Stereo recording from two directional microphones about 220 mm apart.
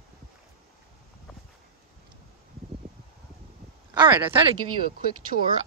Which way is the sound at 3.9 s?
20° right (ahead or behind).